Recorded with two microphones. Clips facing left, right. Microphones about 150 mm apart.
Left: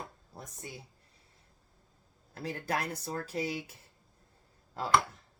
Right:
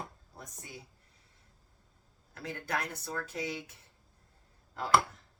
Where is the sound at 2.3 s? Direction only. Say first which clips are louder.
Left 2 dB; 30° left (ahead or behind).